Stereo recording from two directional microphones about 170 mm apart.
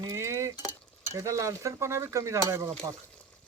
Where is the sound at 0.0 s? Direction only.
15° right (ahead or behind).